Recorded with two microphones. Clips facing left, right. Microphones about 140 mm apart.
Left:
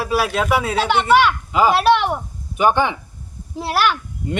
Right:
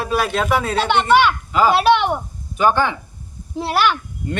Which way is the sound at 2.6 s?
15° left (ahead or behind).